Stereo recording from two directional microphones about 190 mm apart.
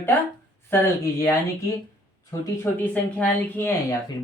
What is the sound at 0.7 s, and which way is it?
Speech, 10° left (ahead or behind).